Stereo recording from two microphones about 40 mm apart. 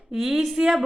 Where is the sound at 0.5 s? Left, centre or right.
Right.